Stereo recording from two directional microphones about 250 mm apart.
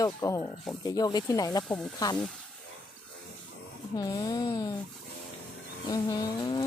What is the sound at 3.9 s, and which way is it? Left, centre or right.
Speech, centre.